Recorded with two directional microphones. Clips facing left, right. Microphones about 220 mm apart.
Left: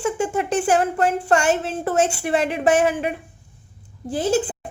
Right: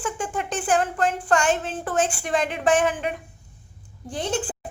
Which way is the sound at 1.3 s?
10° left (ahead or behind).